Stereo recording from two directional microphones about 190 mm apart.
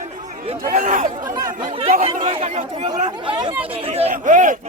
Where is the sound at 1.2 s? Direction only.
20° right (ahead or behind); by 4.6 s 45° right (ahead or behind).